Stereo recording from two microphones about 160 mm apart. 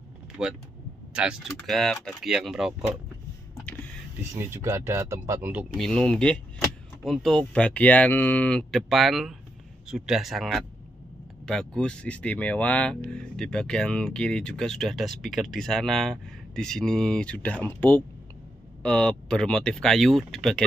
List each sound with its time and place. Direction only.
0.4 s speech: 5° right (ahead or behind)
4.2 s speech: 15° right (ahead or behind)
5.8 s speech: 5° left (ahead or behind)